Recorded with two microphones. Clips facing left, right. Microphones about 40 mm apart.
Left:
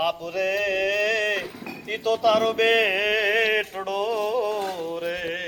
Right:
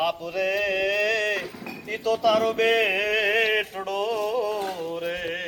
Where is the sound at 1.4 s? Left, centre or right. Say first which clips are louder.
Left 1 dB; centre.